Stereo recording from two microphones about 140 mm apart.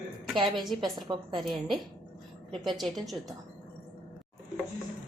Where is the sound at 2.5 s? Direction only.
Centre (ahead or behind).